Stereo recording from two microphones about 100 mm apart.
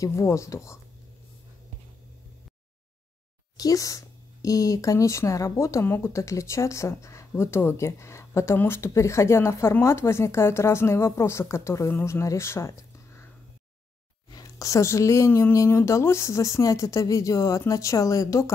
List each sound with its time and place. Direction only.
0.0 s speech: 30° left (ahead or behind)
3.5 s speech: 35° left (ahead or behind)
14.3 s speech: 35° left (ahead or behind)